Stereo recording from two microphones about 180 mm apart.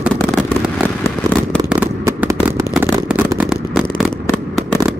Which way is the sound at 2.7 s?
5° right (ahead or behind).